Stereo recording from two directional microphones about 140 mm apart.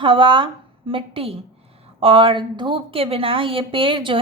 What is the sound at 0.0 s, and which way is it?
A woman's voice, 35° right (ahead or behind).